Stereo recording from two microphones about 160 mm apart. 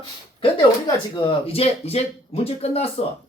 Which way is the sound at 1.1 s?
35° left (ahead or behind).